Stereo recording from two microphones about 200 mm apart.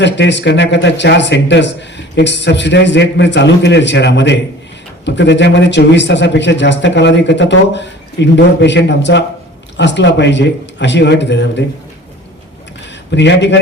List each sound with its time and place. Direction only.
0.0 s a man's voice: 60° left (ahead or behind)
13.1 s a man's voice: 60° left (ahead or behind)